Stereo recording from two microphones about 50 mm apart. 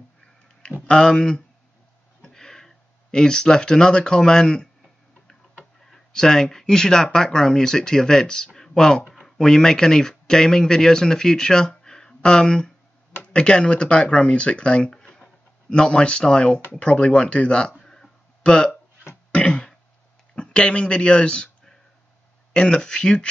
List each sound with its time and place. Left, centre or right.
0.8 s speech: centre
5.9 s speech: centre
8.5 s a sound: centre
9.4 s speech: centre
17.8 s a sound: centre
19.3 s throat clearing: left
20.3 s speech: left
22.5 s speech: centre